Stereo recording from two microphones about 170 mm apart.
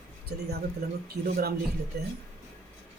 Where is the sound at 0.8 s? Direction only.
60° right (ahead or behind).